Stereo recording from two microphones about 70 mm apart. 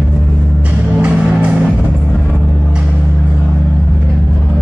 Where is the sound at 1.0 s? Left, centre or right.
Centre.